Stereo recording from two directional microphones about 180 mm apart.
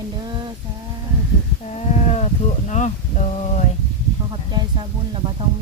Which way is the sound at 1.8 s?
35° left (ahead or behind).